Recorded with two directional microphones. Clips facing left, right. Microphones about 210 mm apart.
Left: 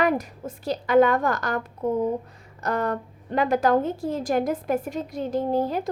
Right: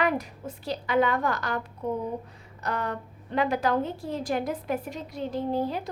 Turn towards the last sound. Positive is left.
turn(degrees=45)  # may be behind; listen again after turning